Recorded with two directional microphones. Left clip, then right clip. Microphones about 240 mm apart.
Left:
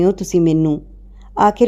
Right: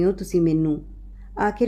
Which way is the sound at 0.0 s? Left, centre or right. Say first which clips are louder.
Left 6 dB; left.